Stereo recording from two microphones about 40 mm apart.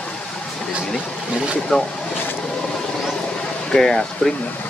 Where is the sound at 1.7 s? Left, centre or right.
Left.